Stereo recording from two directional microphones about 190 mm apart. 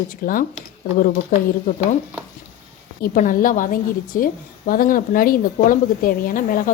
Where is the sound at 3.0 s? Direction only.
45° left (ahead or behind).